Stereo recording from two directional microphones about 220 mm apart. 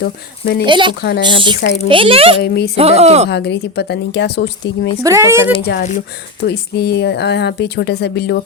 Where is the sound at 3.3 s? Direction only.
50° left (ahead or behind).